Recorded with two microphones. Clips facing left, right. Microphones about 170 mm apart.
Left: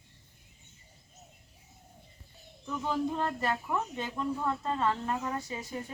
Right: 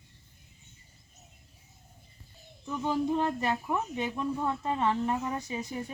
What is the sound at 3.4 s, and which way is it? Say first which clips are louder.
Speech: right 1 dB; 15° right (ahead or behind).